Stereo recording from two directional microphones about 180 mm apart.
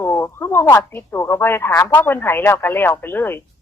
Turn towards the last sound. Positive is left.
turn(degrees=10)  # may be behind; listen again after turning